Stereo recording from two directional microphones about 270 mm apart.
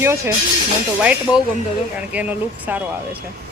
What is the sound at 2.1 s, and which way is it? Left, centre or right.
Speech, centre.